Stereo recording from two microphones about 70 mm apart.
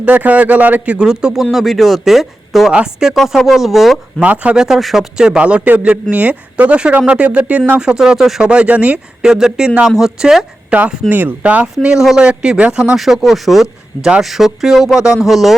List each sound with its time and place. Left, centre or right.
0.0 s speech: right
1.0 s a man's voice: centre
4.2 s a man's voice: centre
7.8 s a man's voice: centre
8.4 s a man's voice: centre
11.1 s speech: right
11.8 s a man's voice: centre
13.0 s speech: centre